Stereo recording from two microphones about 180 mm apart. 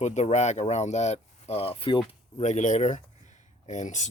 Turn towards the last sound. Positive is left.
turn(degrees=40)  # may be behind; listen again after turning